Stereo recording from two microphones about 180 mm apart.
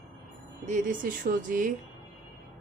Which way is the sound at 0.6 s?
45° right (ahead or behind).